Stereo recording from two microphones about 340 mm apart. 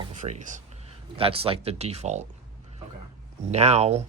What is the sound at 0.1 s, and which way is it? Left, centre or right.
Speech, right.